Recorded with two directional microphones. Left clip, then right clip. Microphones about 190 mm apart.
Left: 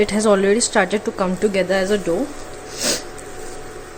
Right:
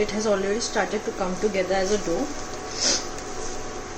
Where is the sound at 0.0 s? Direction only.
50° left (ahead or behind).